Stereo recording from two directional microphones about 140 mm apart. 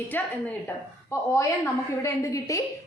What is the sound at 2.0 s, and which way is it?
Speech, 20° left (ahead or behind).